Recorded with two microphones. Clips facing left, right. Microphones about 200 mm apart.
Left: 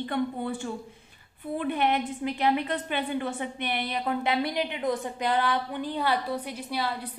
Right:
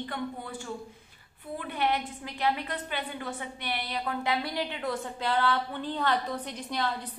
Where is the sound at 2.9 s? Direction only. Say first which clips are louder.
Left 6 dB; 20° left (ahead or behind).